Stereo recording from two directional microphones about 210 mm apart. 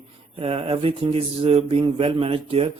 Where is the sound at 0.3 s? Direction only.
25° right (ahead or behind).